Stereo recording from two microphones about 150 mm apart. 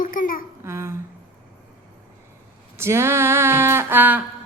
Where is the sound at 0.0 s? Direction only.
65° left (ahead or behind).